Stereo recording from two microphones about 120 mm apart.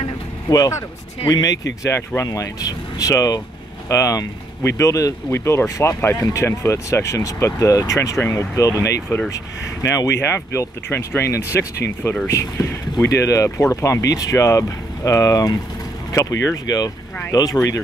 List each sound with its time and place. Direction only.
0.5 s speech: 30° left (ahead or behind)